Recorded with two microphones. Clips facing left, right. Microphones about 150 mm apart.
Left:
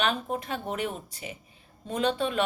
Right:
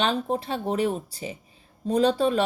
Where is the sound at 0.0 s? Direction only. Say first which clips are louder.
Right 4 dB; 30° right (ahead or behind).